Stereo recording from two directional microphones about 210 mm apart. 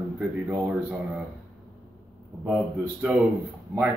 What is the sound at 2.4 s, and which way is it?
Speech, 5° right (ahead or behind).